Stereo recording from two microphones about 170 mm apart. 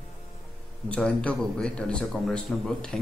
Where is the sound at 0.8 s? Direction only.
5° left (ahead or behind).